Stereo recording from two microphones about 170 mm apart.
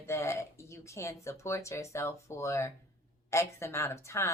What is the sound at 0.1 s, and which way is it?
A woman's voice, 15° left (ahead or behind).